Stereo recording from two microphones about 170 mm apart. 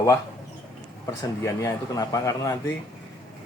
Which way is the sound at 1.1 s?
20° left (ahead or behind).